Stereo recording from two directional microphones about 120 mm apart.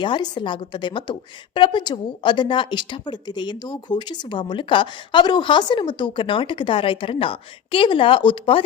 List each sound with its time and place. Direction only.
0.0 s a woman's voice: 40° left (ahead or behind)